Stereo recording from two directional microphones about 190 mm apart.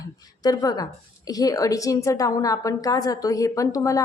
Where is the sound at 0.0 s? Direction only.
20° left (ahead or behind).